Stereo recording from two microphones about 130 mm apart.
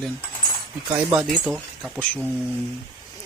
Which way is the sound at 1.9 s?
10° left (ahead or behind).